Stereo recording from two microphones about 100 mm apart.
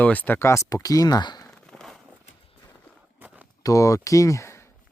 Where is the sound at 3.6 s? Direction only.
35° left (ahead or behind).